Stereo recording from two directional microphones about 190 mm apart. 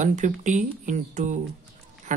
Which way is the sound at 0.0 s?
40° right (ahead or behind).